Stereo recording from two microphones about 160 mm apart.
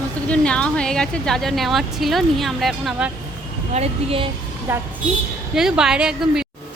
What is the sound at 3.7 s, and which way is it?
Speech, 40° right (ahead or behind).